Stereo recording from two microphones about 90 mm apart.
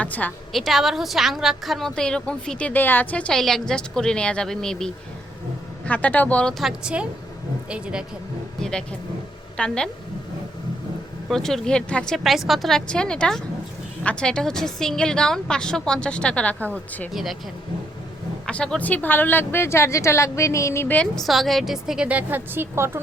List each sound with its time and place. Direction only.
0.0 s a woman's voice: 20° left (ahead or behind)
0.5 s a woman's voice: centre (ahead or behind)
5.8 s a woman's voice: 15° left (ahead or behind)
6.5 s a woman's voice: centre (ahead or behind)
8.6 s a woman's voice: 10° left (ahead or behind)
11.3 s a woman's voice: 5° left (ahead or behind)
12.1 s a woman's voice: centre (ahead or behind); by 17.1 s 15° left (ahead or behind)
17.1 s a woman's voice: centre (ahead or behind)
18.4 s speech: 10° left (ahead or behind); by 20.8 s 35° left (ahead or behind)
20.8 s a woman's voice: 15° left (ahead or behind)
21.2 s a woman's voice: centre (ahead or behind); by 23.0 s 30° right (ahead or behind)